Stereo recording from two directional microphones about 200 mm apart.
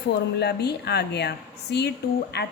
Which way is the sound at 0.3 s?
55° left (ahead or behind).